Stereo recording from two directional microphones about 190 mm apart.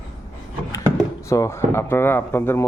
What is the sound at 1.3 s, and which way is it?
Speech, 15° left (ahead or behind).